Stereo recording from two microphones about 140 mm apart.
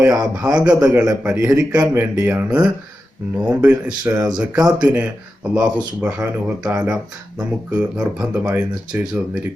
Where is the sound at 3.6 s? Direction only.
10° right (ahead or behind).